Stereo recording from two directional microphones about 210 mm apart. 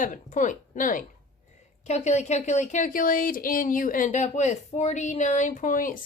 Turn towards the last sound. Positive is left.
turn(degrees=40)  # may be behind; listen again after turning